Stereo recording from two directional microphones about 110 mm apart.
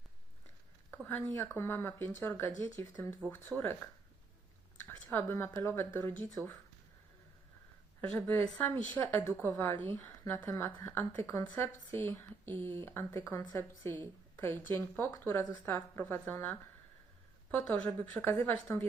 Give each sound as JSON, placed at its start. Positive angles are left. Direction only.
{"t": 1.2, "sound": "a woman's voice", "side_deg": 25}
{"t": 4.9, "sound": "a woman's voice", "side_deg": 20}
{"t": 8.1, "sound": "a woman's voice", "side_deg": 20}